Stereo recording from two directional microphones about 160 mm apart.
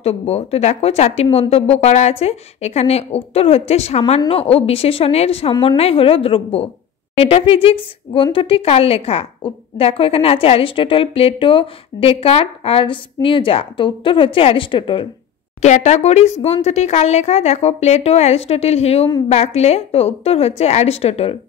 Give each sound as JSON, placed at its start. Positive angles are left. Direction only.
{"t": 0.0, "sound": "a woman's voice", "side_deg": 40}
{"t": 15.6, "sound": "a woman's voice", "side_deg": 50}